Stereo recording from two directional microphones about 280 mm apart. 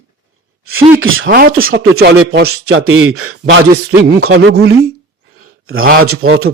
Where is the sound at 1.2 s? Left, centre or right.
Right.